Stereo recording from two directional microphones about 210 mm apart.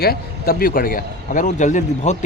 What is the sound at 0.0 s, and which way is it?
Speech, 45° left (ahead or behind).